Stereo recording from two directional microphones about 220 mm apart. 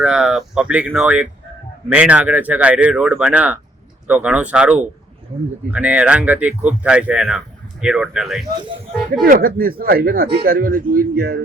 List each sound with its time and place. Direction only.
0.0 s speech: 5° right (ahead or behind)
9.2 s speech: 40° right (ahead or behind)